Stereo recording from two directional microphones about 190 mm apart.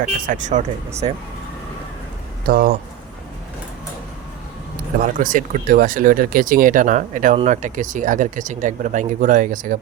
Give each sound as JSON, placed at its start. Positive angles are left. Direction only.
{"t": 0.0, "sound": "speech", "side_deg": -40}
{"t": 1.0, "sound": "speech", "side_deg": -30}
{"t": 2.4, "sound": "speech", "side_deg": -50}
{"t": 5.0, "sound": "speech", "side_deg": -45}